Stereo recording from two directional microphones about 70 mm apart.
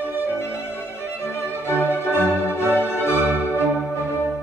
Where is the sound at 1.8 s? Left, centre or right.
Left.